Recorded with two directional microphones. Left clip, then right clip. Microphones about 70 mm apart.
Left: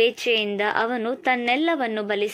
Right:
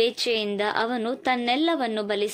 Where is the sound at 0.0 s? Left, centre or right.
Right.